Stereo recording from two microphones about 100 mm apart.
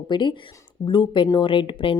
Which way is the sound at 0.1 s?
50° left (ahead or behind).